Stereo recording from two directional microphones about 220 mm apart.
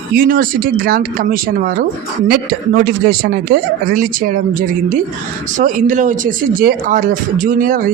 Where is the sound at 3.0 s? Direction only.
50° right (ahead or behind).